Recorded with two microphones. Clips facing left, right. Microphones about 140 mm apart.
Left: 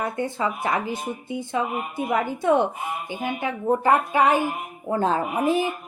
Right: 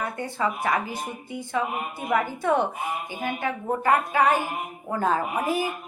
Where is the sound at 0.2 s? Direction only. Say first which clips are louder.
Left 2 dB; 20° left (ahead or behind).